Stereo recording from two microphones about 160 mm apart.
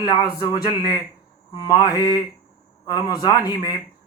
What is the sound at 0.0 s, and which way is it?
A man's voice, 30° left (ahead or behind).